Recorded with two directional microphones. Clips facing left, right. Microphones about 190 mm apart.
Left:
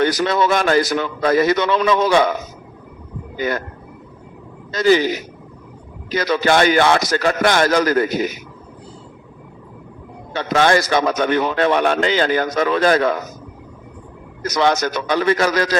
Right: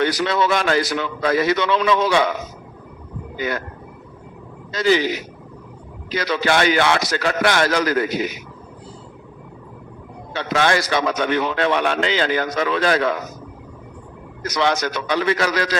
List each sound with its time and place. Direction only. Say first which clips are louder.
0.0 s a man's voice: left 2 dB; 45° left (ahead or behind)
3.3 s speech: left 3 dB; 45° left (ahead or behind)
4.7 s a man's voice: left 3 dB; 45° left (ahead or behind)
10.3 s a man's voice: left 4 dB; 45° left (ahead or behind)
14.4 s a man's voice: left 3 dB; 45° left (ahead or behind)